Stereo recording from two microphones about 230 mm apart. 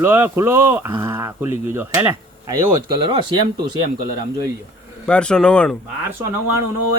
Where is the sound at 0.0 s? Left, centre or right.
Centre.